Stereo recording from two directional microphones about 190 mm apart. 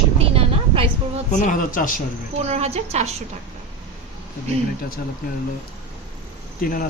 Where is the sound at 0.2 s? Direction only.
30° right (ahead or behind).